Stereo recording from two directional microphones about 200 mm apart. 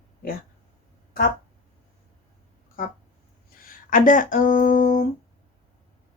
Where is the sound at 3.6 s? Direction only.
45° left (ahead or behind).